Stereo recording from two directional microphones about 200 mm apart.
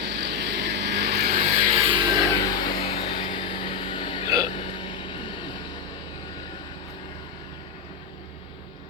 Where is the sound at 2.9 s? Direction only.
25° left (ahead or behind).